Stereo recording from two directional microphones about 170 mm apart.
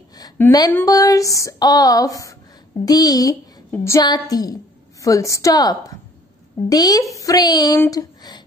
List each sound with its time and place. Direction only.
0.2 s speech: 20° left (ahead or behind)
0.8 s a sound: 20° left (ahead or behind)
7.8 s speech: 20° left (ahead or behind)